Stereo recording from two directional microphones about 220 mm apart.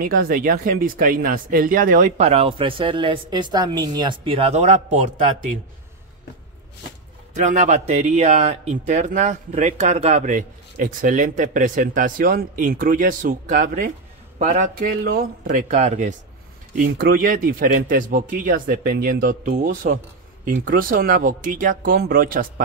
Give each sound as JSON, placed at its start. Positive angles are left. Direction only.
{"t": 0.0, "sound": "speech", "side_deg": -40}
{"t": 7.3, "sound": "speech", "side_deg": -35}